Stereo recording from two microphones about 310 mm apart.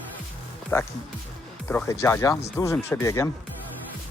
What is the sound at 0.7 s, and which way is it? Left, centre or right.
Music, centre.